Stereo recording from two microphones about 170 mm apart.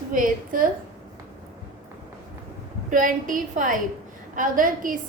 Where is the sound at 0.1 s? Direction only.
55° right (ahead or behind).